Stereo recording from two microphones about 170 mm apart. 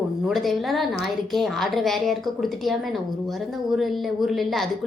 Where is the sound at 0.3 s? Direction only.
Centre (ahead or behind).